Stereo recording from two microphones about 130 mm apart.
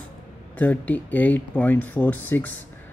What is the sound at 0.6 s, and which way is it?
Speech, 10° left (ahead or behind).